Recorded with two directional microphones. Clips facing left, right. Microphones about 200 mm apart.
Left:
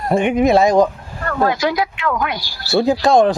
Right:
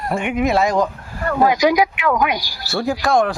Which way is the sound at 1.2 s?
15° right (ahead or behind).